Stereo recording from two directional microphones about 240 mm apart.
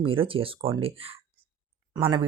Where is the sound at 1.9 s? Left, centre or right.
Centre.